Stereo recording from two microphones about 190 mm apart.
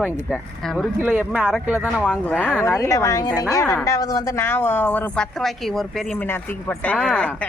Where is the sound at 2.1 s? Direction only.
5° left (ahead or behind).